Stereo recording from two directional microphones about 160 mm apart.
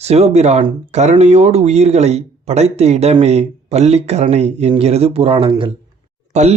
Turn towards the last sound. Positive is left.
turn(degrees=-45)  # may be behind; listen again after turning